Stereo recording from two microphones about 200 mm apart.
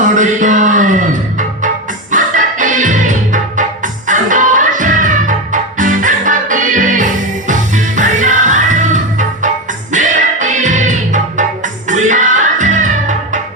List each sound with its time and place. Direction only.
0.0 s music: 40° right (ahead or behind)